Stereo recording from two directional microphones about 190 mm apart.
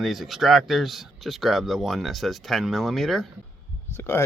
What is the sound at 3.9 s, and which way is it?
Speech, 10° left (ahead or behind).